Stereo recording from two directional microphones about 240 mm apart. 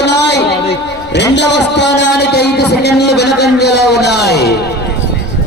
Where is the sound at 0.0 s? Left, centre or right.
Left.